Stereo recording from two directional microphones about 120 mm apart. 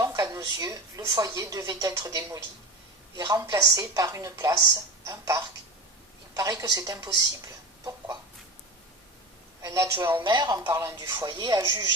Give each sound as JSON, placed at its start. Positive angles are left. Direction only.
{"t": 0.0, "sound": "speech", "side_deg": -30}
{"t": 7.9, "sound": "chicken", "side_deg": -25}
{"t": 9.6, "sound": "a man's voice", "side_deg": -25}
{"t": 10.2, "sound": "speech", "side_deg": -40}